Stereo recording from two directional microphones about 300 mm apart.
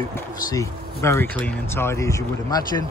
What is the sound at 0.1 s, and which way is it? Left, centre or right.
Speech, centre.